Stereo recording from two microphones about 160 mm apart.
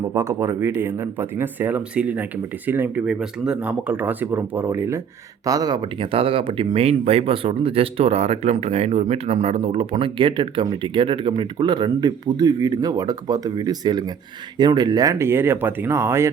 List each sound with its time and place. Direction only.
0.1 s speech: 25° right (ahead or behind)